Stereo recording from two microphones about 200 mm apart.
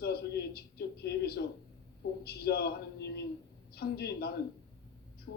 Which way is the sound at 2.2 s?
50° left (ahead or behind).